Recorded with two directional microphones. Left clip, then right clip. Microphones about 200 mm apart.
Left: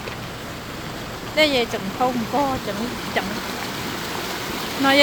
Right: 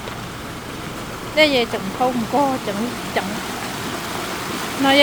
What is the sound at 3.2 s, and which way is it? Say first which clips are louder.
Speech: right 1 dB; 10° right (ahead or behind).